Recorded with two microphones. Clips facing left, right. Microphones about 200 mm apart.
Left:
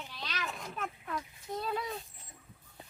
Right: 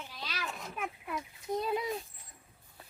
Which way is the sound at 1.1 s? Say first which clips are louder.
Right 5 dB; 15° right (ahead or behind).